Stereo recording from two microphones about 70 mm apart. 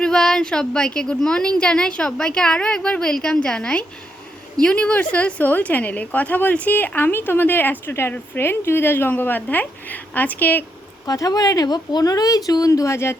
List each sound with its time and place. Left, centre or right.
0.0 s a woman's voice: centre; by 10.6 s left
11.0 s speech: left